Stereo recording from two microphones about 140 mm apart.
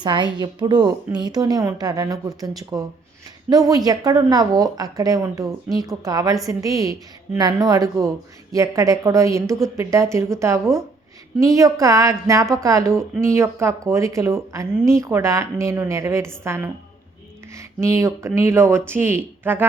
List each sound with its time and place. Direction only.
0.0 s a woman's voice: 35° right (ahead or behind)
17.5 s a woman's voice: 20° right (ahead or behind)